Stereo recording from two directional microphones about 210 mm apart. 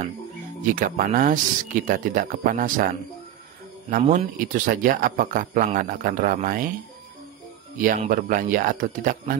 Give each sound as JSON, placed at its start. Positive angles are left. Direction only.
{"t": 0.7, "sound": "speech", "side_deg": -40}
{"t": 3.9, "sound": "speech", "side_deg": -35}
{"t": 7.7, "sound": "speech", "side_deg": -40}